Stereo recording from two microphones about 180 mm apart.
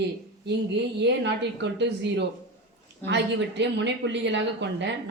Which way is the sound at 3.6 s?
75° right (ahead or behind).